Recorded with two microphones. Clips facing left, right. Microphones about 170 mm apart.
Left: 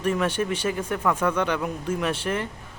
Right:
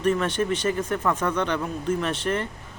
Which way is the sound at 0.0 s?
10° left (ahead or behind).